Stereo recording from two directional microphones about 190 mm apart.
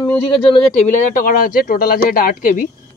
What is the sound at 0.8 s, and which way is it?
Speech, 45° left (ahead or behind).